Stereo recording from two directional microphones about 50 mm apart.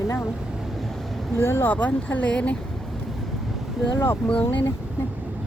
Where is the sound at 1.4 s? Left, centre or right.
Left.